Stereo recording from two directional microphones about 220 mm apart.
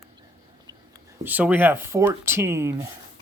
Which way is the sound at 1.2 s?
10° right (ahead or behind).